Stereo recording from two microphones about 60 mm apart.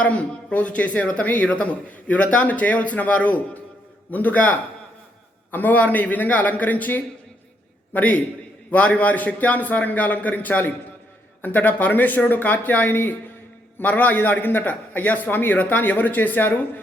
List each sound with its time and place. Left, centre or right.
0.0 s a man's voice: left